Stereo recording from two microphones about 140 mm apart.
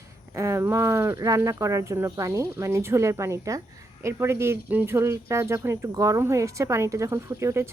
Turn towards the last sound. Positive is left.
turn(degrees=-20)  # may be behind; listen again after turning